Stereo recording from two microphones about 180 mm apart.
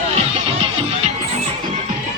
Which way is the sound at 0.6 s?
30° right (ahead or behind).